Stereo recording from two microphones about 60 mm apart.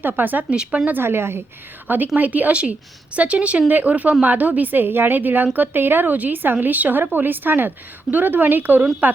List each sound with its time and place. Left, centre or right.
0.0 s speech: right
0.5 s speech: centre
0.9 s speech: right
2.1 s a woman's voice: right